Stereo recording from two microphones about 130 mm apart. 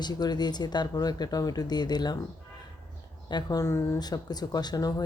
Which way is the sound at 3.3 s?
30° left (ahead or behind).